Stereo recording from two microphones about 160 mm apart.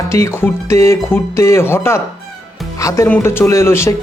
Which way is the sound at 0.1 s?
20° left (ahead or behind).